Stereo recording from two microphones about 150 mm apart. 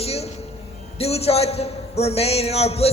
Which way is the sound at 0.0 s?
45° left (ahead or behind).